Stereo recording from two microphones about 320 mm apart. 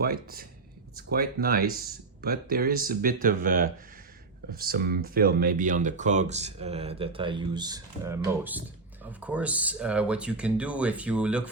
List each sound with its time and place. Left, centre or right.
0.0 s speech: right; by 11.4 s centre